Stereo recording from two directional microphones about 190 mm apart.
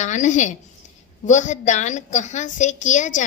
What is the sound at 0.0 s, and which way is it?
A woman's voice, 40° left (ahead or behind).